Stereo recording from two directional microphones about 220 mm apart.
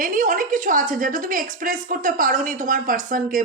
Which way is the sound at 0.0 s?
35° right (ahead or behind).